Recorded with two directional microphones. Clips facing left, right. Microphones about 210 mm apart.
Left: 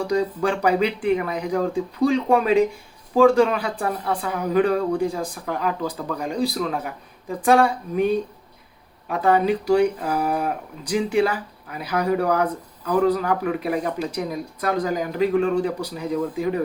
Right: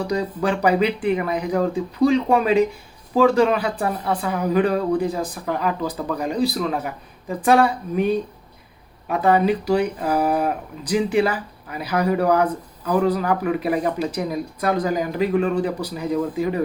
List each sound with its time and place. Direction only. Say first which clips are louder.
0.1 s a woman's voice: left 2 dB; 5° right (ahead or behind)
9.0 s a woman's voice: right 1 dB; 5° right (ahead or behind)